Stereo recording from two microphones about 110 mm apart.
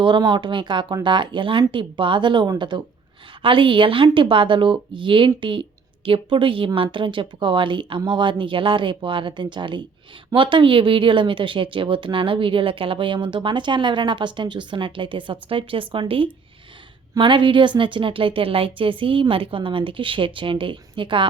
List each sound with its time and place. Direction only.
0.0 s speech: 45° right (ahead or behind)